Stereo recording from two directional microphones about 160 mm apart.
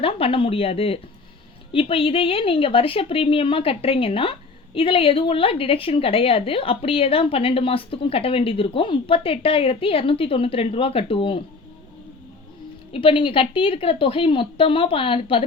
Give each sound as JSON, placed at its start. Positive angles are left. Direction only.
{"t": 0.0, "sound": "a woman's voice", "side_deg": 35}
{"t": 12.9, "sound": "a woman's voice", "side_deg": 35}